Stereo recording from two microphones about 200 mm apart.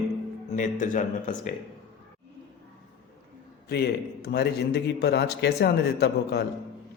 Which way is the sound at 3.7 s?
55° left (ahead or behind).